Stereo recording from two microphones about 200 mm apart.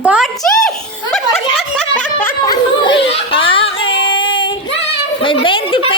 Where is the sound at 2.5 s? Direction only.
25° left (ahead or behind).